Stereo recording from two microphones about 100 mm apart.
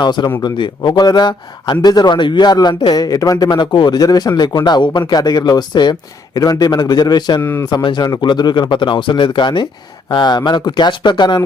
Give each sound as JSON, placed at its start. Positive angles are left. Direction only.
{"t": 0.0, "sound": "speech", "side_deg": 45}
{"t": 3.5, "sound": "speech", "side_deg": 50}